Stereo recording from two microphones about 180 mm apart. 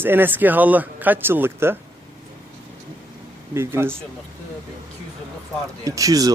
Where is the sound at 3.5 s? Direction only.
15° right (ahead or behind).